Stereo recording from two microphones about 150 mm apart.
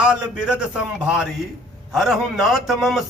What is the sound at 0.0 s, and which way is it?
A man's voice, 5° right (ahead or behind).